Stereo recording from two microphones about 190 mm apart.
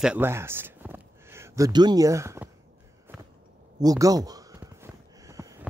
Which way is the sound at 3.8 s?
20° right (ahead or behind).